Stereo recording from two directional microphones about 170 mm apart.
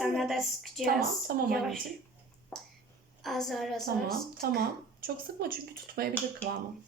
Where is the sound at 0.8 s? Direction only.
60° right (ahead or behind).